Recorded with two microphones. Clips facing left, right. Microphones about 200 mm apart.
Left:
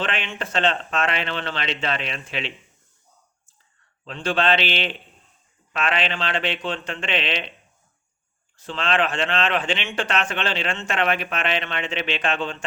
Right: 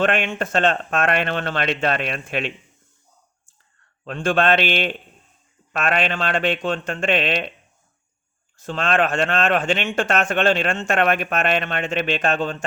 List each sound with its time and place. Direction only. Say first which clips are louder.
0.0 s speech: right 7 dB; 50° right (ahead or behind)
4.0 s speech: right 3 dB; 50° right (ahead or behind)
8.5 s speech: right 3 dB; 45° right (ahead or behind)